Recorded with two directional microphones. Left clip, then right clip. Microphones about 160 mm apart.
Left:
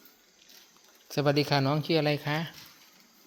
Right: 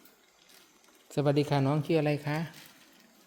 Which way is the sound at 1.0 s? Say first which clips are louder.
Left 2 dB; centre (ahead or behind).